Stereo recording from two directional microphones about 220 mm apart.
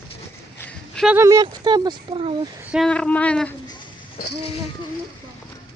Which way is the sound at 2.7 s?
Centre (ahead or behind).